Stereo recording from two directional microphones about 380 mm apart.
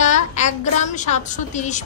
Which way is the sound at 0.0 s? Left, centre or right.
Centre.